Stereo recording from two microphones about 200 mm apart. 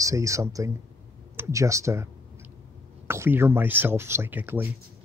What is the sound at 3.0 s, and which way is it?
Speech, 10° right (ahead or behind).